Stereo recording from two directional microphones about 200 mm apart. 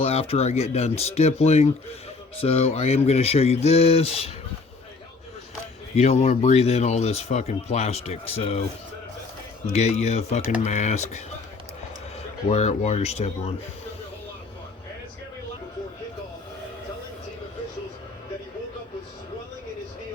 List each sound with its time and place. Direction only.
0.0 s speech: 30° left (ahead or behind)
6.0 s speech: 35° left (ahead or behind)
9.7 s speech: 35° left (ahead or behind)
12.5 s speech: 35° left (ahead or behind)